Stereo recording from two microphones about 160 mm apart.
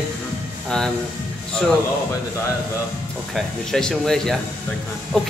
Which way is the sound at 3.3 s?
5° left (ahead or behind).